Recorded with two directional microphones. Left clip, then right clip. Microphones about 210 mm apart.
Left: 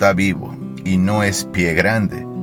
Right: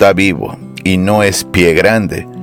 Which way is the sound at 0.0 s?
45° right (ahead or behind).